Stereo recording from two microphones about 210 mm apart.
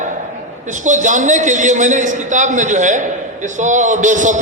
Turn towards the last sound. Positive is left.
turn(degrees=-35)  # may be behind; listen again after turning